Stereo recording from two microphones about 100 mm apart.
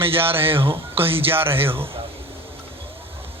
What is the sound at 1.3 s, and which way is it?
Speech, 25° right (ahead or behind).